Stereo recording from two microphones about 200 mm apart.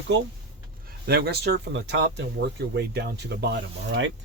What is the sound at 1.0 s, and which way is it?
Speech, 55° right (ahead or behind).